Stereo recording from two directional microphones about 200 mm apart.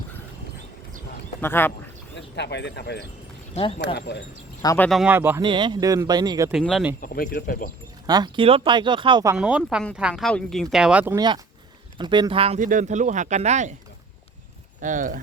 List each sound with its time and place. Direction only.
1.4 s speech: 10° left (ahead or behind)
2.1 s speech: 60° left (ahead or behind)
3.5 s speech: 30° left (ahead or behind)
3.9 s speech: 55° left (ahead or behind)
4.6 s speech: 15° left (ahead or behind)
4.9 s speech: 5° right (ahead or behind)
5.4 s speech: 25° right (ahead or behind)
6.5 s speech: centre (ahead or behind)
7.0 s speech: 45° left (ahead or behind)
8.0 s speech: 20° right (ahead or behind)
9.3 s speech: 5° right (ahead or behind)
11.9 s speech: 25° right (ahead or behind)
14.8 s speech: 40° right (ahead or behind)